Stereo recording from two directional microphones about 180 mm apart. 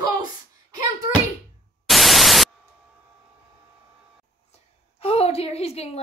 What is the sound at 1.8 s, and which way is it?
Static, centre (ahead or behind).